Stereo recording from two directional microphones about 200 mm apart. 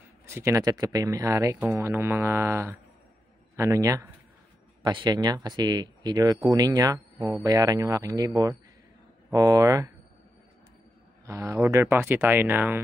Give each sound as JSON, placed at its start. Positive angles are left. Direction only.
{"t": 0.3, "sound": "speech", "side_deg": -15}
{"t": 11.2, "sound": "speech", "side_deg": -15}